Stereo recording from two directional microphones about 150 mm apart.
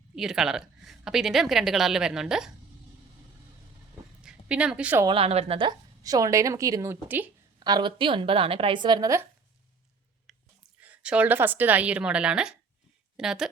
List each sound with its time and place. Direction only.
0.2 s a woman's voice: 5° right (ahead or behind)
4.2 s speech: 5° right (ahead or behind)
5.0 s a woman's voice: 40° right (ahead or behind); by 7.3 s 15° right (ahead or behind)
7.6 s a woman's voice: 30° right (ahead or behind)
10.3 s whispering: centre (ahead or behind)
10.8 s a woman's voice: 10° right (ahead or behind)